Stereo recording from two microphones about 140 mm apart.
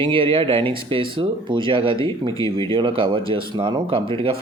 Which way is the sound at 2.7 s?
40° right (ahead or behind).